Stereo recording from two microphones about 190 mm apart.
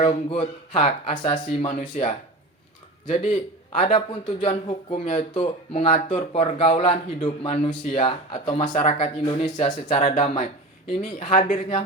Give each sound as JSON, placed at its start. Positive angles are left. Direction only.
{"t": 0.0, "sound": "speech", "side_deg": 30}